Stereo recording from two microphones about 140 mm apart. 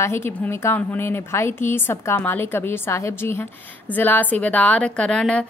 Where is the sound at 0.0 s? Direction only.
15° left (ahead or behind).